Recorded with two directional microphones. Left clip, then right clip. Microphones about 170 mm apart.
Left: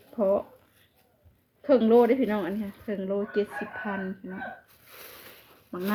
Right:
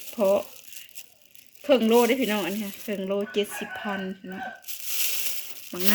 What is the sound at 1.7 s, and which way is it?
Speech, 10° right (ahead or behind).